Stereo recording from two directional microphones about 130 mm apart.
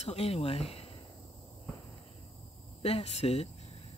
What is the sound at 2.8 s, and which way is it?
Speech, 55° left (ahead or behind).